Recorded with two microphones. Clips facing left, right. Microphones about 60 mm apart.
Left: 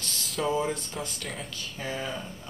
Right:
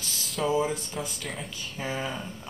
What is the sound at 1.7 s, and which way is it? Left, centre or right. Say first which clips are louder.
Speech: right 2 dB; centre.